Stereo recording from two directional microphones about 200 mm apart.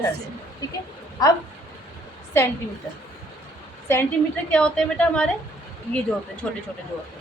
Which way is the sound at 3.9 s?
15° left (ahead or behind).